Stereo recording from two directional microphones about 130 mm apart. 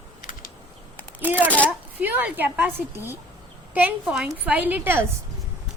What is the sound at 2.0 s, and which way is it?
Speech, 15° right (ahead or behind).